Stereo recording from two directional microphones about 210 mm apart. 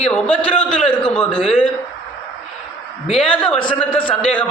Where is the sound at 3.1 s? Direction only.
5° left (ahead or behind).